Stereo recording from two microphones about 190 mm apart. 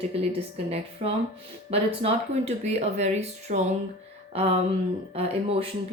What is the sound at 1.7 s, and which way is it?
A woman's voice, 30° right (ahead or behind).